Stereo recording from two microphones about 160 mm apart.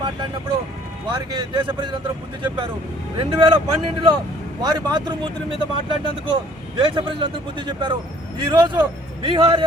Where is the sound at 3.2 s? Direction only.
35° right (ahead or behind).